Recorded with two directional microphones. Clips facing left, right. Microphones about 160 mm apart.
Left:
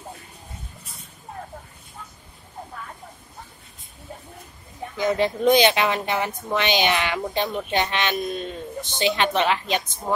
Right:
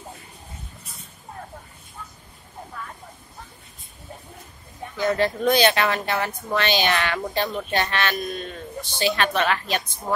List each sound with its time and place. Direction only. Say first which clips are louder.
4.9 s speech: even; 15° left (ahead or behind)